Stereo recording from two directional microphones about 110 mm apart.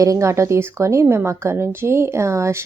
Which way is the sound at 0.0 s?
30° right (ahead or behind).